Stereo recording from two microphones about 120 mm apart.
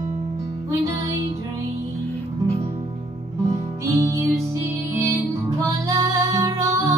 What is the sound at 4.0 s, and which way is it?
Music, 25° right (ahead or behind).